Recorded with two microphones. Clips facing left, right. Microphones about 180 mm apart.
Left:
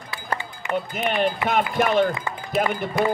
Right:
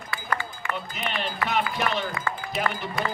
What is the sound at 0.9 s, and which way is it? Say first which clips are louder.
Speech: left 8 dB; 50° left (ahead or behind).